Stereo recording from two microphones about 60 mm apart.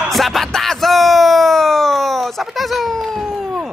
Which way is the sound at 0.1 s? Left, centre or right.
Centre.